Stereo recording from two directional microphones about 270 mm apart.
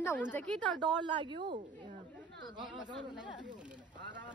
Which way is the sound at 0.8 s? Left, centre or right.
Centre.